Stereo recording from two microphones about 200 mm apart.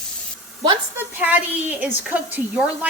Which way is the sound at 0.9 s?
10° right (ahead or behind).